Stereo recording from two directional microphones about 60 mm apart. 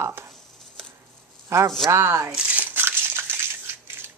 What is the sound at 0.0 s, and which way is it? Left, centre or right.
Speech, right.